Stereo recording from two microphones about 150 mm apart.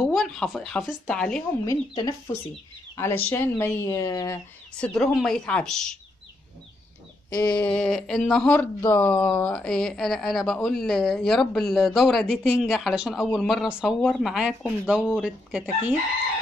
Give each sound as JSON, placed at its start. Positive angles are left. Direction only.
{"t": 0.0, "sound": "a woman's voice", "side_deg": 0}
{"t": 1.7, "sound": "speech", "side_deg": 25}
{"t": 3.0, "sound": "speech", "side_deg": 15}
{"t": 4.7, "sound": "a woman's voice", "side_deg": 5}
{"t": 7.3, "sound": "a woman's voice", "side_deg": 10}